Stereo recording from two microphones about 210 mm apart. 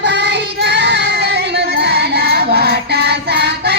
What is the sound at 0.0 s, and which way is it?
Child singing, 55° right (ahead or behind).